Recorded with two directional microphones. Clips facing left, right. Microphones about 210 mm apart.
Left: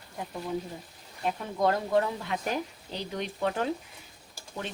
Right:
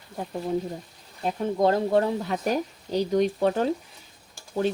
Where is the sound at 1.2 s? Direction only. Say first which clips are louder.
Right 5 dB; 30° right (ahead or behind).